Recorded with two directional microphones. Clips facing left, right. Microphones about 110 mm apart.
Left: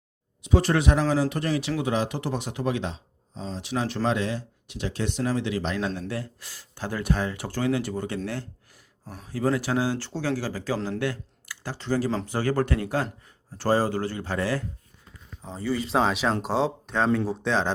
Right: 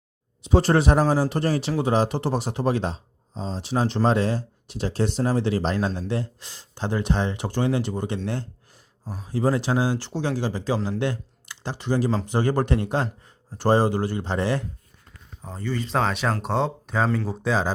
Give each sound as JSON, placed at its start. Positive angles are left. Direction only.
{"t": 0.4, "sound": "speech", "side_deg": -30}
{"t": 6.0, "sound": "speech", "side_deg": -25}
{"t": 15.4, "sound": "speech", "side_deg": 0}